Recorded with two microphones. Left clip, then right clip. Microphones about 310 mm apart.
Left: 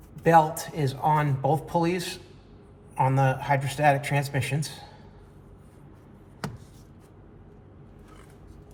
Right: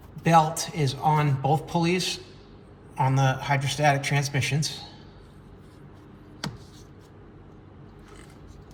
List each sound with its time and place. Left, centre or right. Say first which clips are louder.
0.2 s speech: left 1 dB; centre